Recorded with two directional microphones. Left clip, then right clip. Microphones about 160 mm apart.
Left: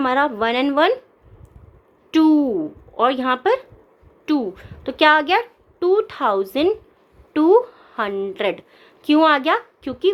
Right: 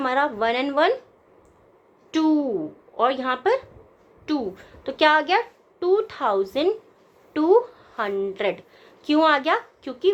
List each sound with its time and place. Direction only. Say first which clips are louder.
0.0 s a child's voice: left 3 dB; 40° left (ahead or behind)
2.0 s a woman's voice: left 6 dB; 45° left (ahead or behind)